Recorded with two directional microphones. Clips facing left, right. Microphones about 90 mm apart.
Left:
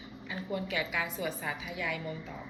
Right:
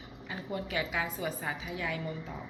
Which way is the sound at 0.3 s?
30° right (ahead or behind).